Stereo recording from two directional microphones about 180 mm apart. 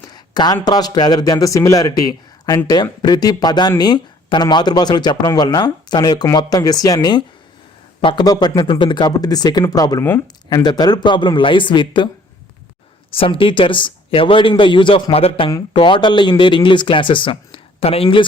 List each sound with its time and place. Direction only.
0.1 s speech: 20° left (ahead or behind)
13.1 s speech: 30° left (ahead or behind)